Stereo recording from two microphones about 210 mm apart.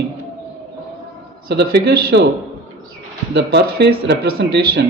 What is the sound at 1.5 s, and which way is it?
Speech, 55° right (ahead or behind).